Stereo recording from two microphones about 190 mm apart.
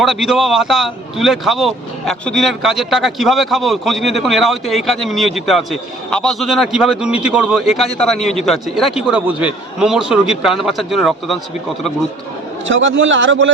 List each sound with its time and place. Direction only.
0.0 s speech: centre (ahead or behind)
12.6 s a man's voice: 85° right